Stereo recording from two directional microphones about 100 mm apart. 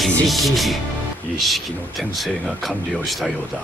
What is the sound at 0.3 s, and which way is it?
Speech, centre (ahead or behind).